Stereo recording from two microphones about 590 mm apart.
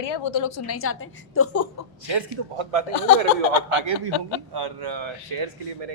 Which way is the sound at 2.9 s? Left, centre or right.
Left.